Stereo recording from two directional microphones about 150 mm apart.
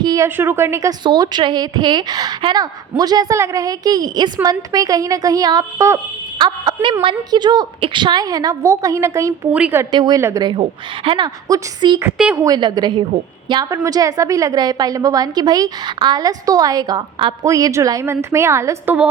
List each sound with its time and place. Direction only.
0.0 s a sound: 25° right (ahead or behind)
0.3 s a woman's voice: 15° right (ahead or behind)
1.0 s a woman's voice: 30° right (ahead or behind)
7.0 s a woman's voice: 30° right (ahead or behind)
9.5 s a woman's voice: 10° right (ahead or behind)
9.9 s a woman's voice: 30° right (ahead or behind)
12.1 s a woman's voice: 5° right (ahead or behind)
12.4 s a woman's voice: 25° right (ahead or behind)
17.4 s a woman's voice: 20° right (ahead or behind)